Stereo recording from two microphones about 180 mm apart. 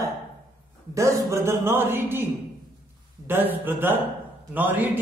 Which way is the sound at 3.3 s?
10° right (ahead or behind).